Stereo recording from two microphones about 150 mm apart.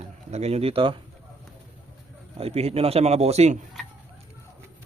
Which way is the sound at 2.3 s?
40° right (ahead or behind).